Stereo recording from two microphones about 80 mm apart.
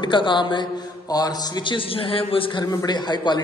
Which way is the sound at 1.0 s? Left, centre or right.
Left.